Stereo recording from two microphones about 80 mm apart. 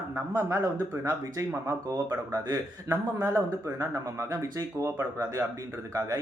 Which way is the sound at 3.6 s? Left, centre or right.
Right.